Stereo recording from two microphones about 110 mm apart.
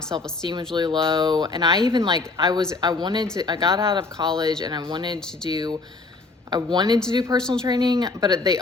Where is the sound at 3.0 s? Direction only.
45° right (ahead or behind).